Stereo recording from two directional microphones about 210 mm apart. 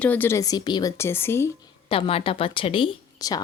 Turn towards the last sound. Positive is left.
turn(degrees=20)  # may be behind; listen again after turning